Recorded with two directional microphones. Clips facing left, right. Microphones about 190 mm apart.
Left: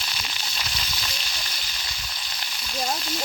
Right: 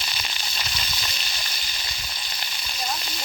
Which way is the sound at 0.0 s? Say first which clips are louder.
Even; centre (ahead or behind).